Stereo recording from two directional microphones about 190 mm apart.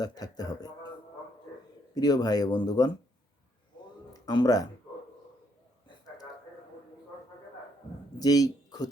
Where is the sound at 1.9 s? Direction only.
20° left (ahead or behind).